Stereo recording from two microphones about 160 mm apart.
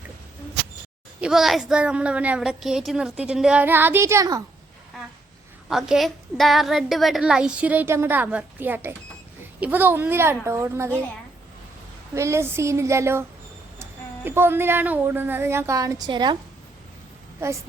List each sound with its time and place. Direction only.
1.2 s a woman's voice: centre (ahead or behind); by 4.4 s 20° right (ahead or behind)
5.6 s a woman's voice: 5° right (ahead or behind)
12.1 s a woman's voice: 15° right (ahead or behind)
14.3 s a woman's voice: 15° right (ahead or behind)